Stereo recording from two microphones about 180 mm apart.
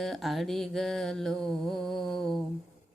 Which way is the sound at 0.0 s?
Centre (ahead or behind).